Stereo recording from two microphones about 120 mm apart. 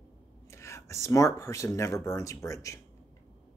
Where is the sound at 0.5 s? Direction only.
25° left (ahead or behind).